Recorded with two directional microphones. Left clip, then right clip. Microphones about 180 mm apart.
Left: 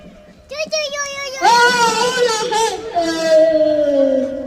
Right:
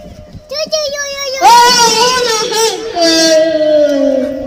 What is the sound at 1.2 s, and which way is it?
Child singing, 10° right (ahead or behind).